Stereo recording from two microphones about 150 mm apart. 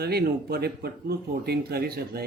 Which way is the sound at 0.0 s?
90° right.